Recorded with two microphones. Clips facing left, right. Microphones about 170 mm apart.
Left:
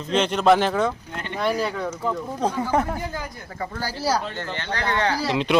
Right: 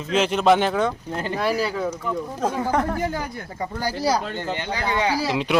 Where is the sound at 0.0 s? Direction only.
5° right (ahead or behind).